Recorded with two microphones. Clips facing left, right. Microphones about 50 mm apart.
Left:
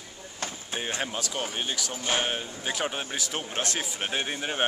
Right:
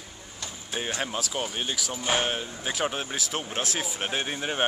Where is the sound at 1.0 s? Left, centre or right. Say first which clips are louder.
Right 1 dB; centre.